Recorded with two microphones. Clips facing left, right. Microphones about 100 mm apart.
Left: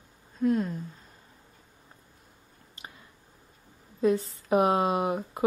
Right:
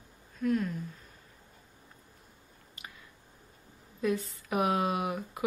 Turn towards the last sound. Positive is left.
turn(degrees=30)  # may be behind; listen again after turning